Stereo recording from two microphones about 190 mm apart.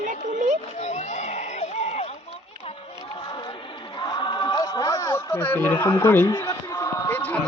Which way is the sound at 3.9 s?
25° left (ahead or behind).